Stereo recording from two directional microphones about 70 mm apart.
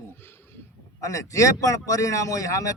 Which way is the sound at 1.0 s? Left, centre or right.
Left.